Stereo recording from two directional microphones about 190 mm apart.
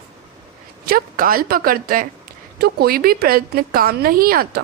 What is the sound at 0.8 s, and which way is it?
A woman's voice, 50° right (ahead or behind).